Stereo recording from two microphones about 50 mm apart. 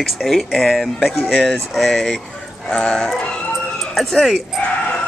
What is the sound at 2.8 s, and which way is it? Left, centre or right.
Speech, centre.